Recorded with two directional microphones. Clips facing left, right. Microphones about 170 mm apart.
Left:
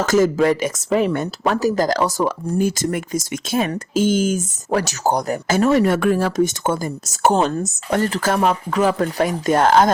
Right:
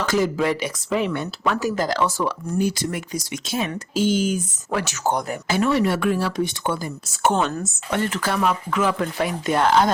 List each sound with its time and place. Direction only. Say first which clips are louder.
0.0 s speech: left 5 dB; 45° left (ahead or behind)